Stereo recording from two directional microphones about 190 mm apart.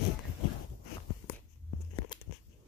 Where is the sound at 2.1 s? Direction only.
20° left (ahead or behind).